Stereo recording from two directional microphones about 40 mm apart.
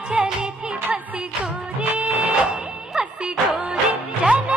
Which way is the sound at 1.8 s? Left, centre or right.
Right.